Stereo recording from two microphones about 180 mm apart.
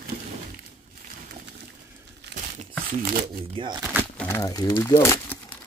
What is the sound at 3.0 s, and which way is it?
Speech, 55° right (ahead or behind).